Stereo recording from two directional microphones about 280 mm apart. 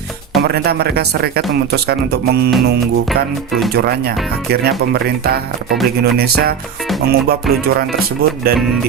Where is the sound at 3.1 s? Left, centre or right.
Centre.